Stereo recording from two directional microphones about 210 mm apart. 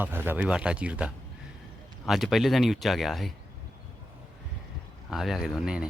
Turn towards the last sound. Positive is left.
turn(degrees=-5)  # may be behind; listen again after turning